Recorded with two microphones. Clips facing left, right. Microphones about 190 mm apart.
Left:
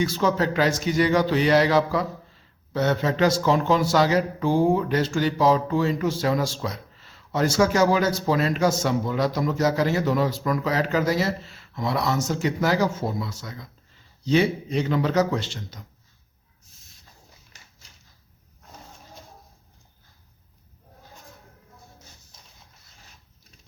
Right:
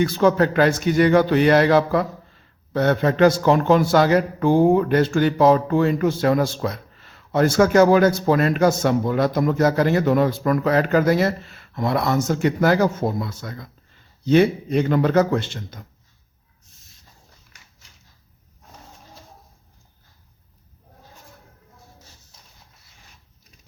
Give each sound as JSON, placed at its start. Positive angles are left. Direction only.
{"t": 0.0, "sound": "speech", "side_deg": -55}